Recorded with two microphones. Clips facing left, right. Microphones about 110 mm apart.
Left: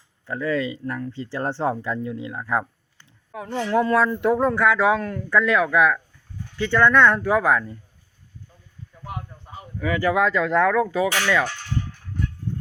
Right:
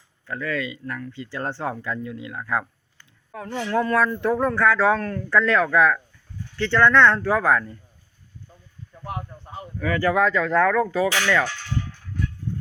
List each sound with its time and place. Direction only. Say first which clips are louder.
0.3 s speech: left 4 dB; 25° left (ahead or behind)
2.5 s a sound: left 1 dB; 25° left (ahead or behind)
3.3 s speech: left 2 dB; 20° left (ahead or behind)
9.7 s speech: even; 15° left (ahead or behind)